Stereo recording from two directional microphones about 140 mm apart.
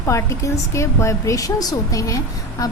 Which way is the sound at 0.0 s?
20° left (ahead or behind).